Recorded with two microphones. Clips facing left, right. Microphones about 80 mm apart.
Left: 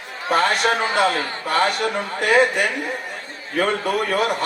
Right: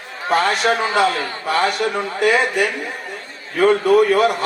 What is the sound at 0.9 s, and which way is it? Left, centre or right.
A man's voice, left.